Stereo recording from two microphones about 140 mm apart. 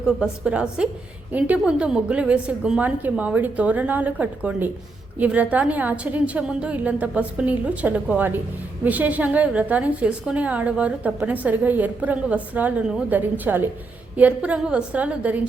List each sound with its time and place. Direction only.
0.2 s a woman's voice: 5° right (ahead or behind)